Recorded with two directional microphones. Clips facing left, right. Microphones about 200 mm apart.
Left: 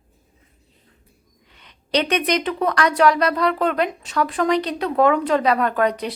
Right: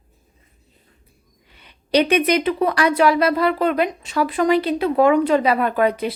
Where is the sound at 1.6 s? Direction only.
10° right (ahead or behind).